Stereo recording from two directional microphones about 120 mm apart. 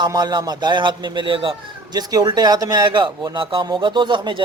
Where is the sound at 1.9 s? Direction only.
35° right (ahead or behind).